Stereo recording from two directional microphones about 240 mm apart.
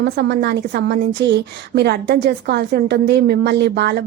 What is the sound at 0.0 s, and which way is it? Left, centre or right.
A woman's voice, right.